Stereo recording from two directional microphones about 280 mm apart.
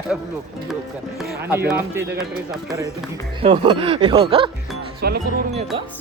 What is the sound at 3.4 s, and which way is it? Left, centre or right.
Speech, centre.